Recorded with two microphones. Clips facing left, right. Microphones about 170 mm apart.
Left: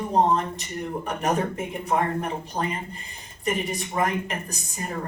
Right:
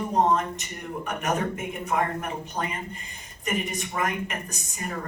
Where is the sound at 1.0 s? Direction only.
30° left (ahead or behind).